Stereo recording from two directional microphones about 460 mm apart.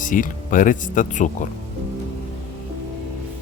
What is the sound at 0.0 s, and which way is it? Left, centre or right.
Speech, centre.